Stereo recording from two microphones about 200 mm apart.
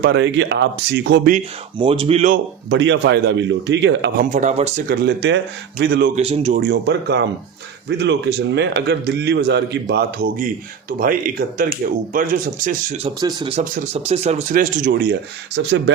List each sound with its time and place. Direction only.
0.0 s speech: 55° right (ahead or behind)
1.8 s speech: 25° right (ahead or behind)
2.3 s speech: 60° right (ahead or behind)
4.2 s speech: 40° right (ahead or behind)
4.9 s a man's voice: 60° right (ahead or behind)
6.1 s speech: 30° right (ahead or behind)
6.6 s a man's voice: 55° right (ahead or behind); by 13.1 s 40° right (ahead or behind)
13.1 s speech: 20° right (ahead or behind)
13.5 s speech: 40° right (ahead or behind)
15.6 s speech: 65° right (ahead or behind)